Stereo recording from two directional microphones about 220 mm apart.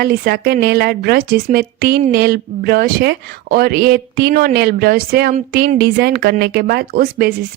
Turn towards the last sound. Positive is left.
turn(degrees=-40)  # may be behind; listen again after turning